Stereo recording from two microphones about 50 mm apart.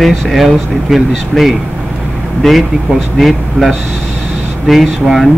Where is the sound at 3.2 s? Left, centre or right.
Centre.